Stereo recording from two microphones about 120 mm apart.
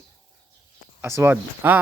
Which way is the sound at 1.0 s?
20° right (ahead or behind).